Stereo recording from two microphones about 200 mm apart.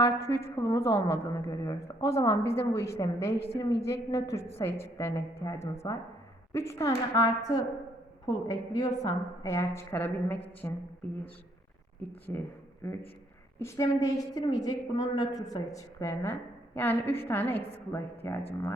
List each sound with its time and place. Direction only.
0.0 s a woman's voice: 15° left (ahead or behind)
3.4 s a woman's voice: 30° left (ahead or behind)
3.8 s a woman's voice: 15° left (ahead or behind)
12.3 s a woman's voice: 10° left (ahead or behind)
13.6 s a woman's voice: 15° left (ahead or behind)